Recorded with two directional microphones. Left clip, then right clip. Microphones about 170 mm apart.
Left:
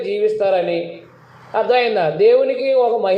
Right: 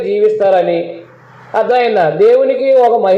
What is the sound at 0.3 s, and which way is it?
A man's voice, 30° right (ahead or behind).